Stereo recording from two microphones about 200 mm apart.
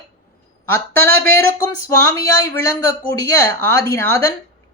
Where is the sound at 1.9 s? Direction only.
15° left (ahead or behind).